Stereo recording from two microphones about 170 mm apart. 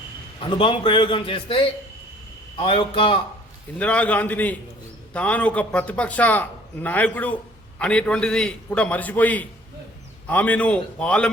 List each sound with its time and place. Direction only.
0.3 s a man's voice: 30° left (ahead or behind)
3.8 s a man's voice: 5° left (ahead or behind)